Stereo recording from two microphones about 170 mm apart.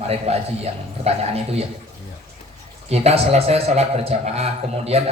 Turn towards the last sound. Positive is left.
turn(degrees=-35)  # may be behind; listen again after turning